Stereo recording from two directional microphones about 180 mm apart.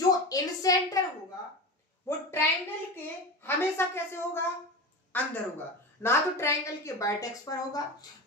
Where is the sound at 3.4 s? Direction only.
15° left (ahead or behind).